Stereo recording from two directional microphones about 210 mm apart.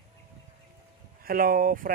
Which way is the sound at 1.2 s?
45° right (ahead or behind).